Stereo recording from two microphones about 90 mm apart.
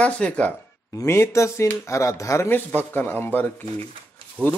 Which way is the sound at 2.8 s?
20° left (ahead or behind).